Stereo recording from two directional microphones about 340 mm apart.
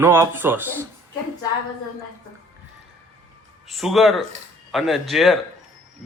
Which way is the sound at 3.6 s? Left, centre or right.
Centre.